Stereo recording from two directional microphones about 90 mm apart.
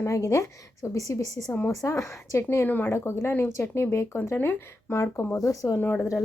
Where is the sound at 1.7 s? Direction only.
35° left (ahead or behind).